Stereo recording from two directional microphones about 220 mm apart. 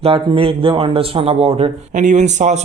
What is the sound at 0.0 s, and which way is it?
A man's voice, 25° right (ahead or behind).